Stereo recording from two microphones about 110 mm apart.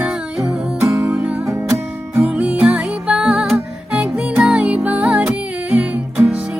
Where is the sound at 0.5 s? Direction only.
20° right (ahead or behind).